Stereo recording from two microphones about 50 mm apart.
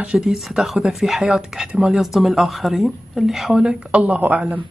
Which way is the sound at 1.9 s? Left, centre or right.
Centre.